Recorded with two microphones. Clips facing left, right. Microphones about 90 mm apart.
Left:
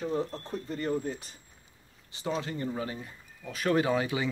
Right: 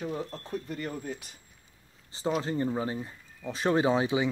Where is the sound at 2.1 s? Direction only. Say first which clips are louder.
Right 4 dB; 30° right (ahead or behind).